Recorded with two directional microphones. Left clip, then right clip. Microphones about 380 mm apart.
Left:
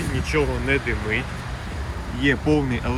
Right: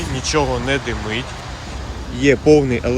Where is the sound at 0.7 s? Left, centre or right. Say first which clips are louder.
Right 2 dB; right.